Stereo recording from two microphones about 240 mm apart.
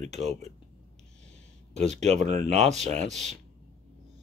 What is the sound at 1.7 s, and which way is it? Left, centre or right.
Speech, right.